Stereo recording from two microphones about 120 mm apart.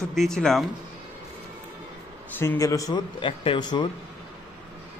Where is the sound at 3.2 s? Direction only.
45° left (ahead or behind).